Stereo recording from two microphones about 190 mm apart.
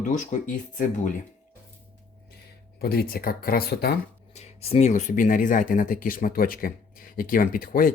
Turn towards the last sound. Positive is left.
turn(degrees=50)  # may be behind; listen again after turning